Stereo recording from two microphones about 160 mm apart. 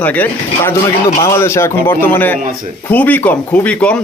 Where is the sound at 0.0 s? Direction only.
10° left (ahead or behind).